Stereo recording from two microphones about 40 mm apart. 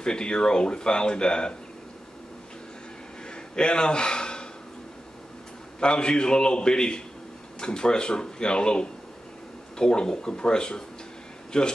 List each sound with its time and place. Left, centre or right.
0.0 s speech: left
3.5 s speech: left
5.8 s speech: left